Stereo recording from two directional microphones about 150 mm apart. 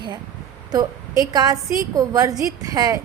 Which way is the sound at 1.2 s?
25° right (ahead or behind).